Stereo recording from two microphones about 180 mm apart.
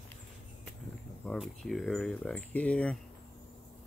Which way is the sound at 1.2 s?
5° left (ahead or behind).